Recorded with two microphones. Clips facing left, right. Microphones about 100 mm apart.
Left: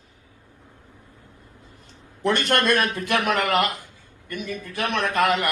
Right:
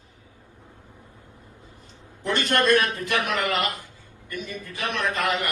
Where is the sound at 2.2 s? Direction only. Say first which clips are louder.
Left 1 dB; 70° left (ahead or behind).